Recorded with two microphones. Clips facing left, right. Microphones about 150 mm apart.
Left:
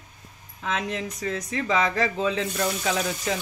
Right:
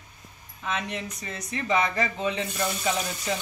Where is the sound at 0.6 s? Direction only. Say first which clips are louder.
Left 3 dB; 90° left.